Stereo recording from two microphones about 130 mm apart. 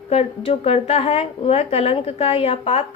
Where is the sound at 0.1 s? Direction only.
50° left (ahead or behind).